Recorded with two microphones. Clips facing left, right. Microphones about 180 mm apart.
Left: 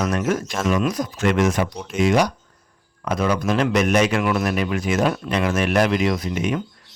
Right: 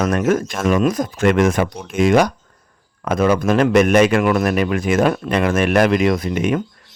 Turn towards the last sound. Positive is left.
turn(degrees=-55)  # may be behind; listen again after turning